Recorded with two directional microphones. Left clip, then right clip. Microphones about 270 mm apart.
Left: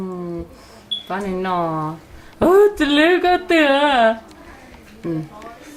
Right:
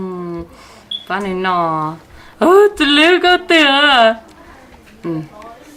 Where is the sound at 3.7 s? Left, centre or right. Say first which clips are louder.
Right 5 dB; right.